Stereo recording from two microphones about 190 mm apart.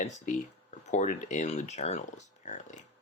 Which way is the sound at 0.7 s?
40° left (ahead or behind).